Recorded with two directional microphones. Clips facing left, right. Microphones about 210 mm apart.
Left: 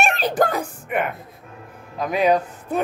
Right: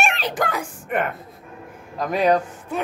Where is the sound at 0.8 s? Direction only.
5° left (ahead or behind).